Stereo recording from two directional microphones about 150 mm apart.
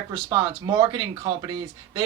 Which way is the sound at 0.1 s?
30° right (ahead or behind).